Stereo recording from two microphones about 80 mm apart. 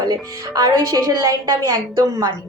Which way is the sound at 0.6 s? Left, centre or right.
Right.